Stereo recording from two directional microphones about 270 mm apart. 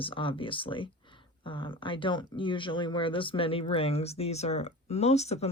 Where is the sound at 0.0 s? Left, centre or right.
Centre.